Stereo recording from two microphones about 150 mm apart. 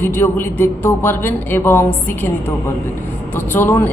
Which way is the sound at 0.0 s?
15° left (ahead or behind).